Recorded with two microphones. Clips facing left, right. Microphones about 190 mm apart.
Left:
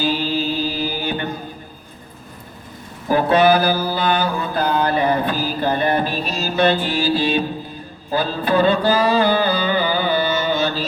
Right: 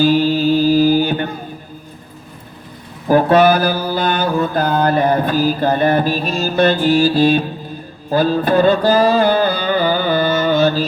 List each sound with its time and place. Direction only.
0.0 s mantra: 50° right (ahead or behind)
3.1 s mantra: 50° right (ahead or behind)
8.1 s music: 45° right (ahead or behind)